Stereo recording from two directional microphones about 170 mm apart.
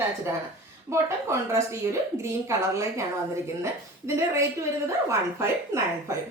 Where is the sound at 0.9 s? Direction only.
15° right (ahead or behind).